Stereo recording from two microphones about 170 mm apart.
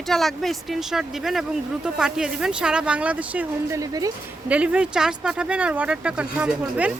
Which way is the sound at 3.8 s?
20° right (ahead or behind).